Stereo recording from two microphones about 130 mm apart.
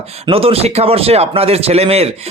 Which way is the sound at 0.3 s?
45° right (ahead or behind).